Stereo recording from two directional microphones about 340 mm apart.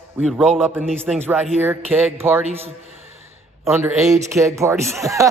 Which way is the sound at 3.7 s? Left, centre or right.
Centre.